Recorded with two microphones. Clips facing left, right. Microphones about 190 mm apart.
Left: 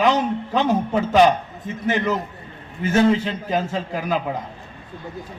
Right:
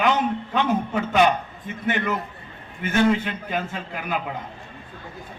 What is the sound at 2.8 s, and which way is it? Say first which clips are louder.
A man's voice: left 3 dB; 35° left (ahead or behind).